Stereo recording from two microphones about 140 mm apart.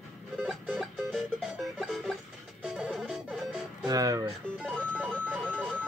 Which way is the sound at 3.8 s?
25° right (ahead or behind).